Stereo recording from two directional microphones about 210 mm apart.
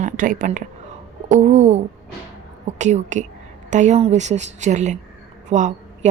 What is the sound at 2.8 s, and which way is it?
A woman's voice, 35° right (ahead or behind).